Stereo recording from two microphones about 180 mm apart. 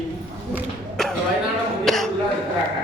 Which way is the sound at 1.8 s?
Centre (ahead or behind).